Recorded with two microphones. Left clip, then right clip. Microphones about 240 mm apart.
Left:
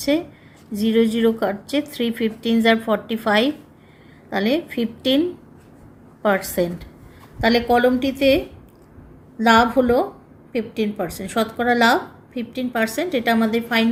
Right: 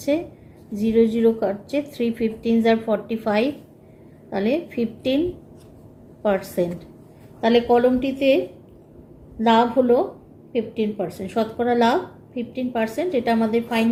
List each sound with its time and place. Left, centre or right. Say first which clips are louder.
0.7 s a woman's voice: even; left
6.2 s a woman's voice: left 2 dB; left
9.4 s speech: left 2 dB; left